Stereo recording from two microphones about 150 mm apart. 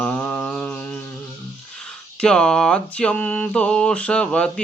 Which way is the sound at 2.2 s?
5° left (ahead or behind).